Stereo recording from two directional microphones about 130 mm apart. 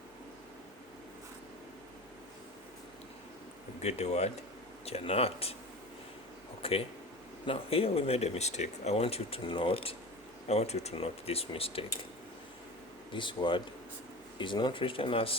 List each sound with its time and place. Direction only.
3.8 s speech: 55° left (ahead or behind)
6.6 s speech: 45° left (ahead or behind)
13.1 s speech: 40° left (ahead or behind)